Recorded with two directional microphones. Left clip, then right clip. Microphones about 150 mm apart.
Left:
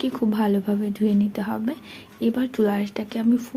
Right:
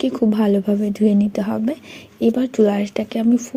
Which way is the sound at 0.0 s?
40° right (ahead or behind).